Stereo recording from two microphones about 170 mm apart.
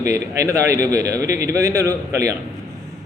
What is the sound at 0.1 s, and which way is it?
A man's voice, 20° right (ahead or behind).